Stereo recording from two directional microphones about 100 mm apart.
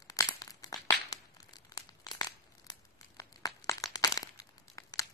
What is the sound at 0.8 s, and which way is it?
Crumpling, 40° left (ahead or behind).